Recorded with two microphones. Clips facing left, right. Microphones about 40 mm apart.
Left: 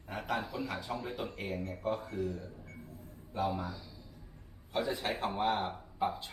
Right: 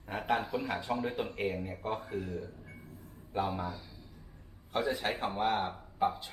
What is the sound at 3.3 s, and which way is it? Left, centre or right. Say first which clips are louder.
Speech: right 1 dB; right.